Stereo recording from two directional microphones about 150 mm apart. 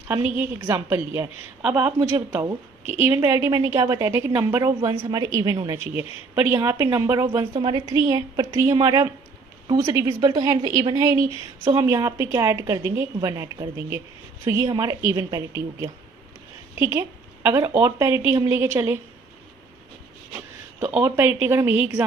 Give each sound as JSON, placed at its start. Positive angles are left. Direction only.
{"t": 0.1, "sound": "a woman's voice", "side_deg": -10}
{"t": 20.3, "sound": "speech", "side_deg": -15}